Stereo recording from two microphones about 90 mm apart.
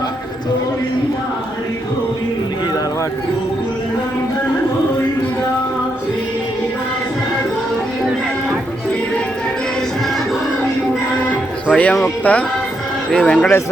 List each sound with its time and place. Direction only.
11.7 s speech: 15° left (ahead or behind)